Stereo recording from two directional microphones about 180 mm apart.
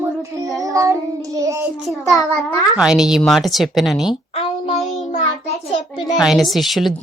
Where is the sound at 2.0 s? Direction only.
15° left (ahead or behind).